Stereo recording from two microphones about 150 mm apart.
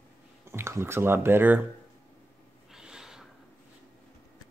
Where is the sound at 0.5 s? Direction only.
15° right (ahead or behind).